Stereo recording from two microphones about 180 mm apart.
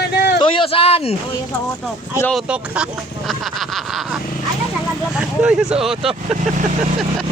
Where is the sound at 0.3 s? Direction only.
30° left (ahead or behind).